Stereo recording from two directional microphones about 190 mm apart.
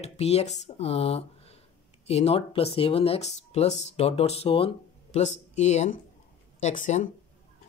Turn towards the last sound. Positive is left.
turn(degrees=40)  # may be behind; listen again after turning